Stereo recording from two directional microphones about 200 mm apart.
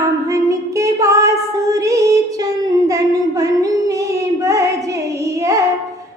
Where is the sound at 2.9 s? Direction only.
15° right (ahead or behind).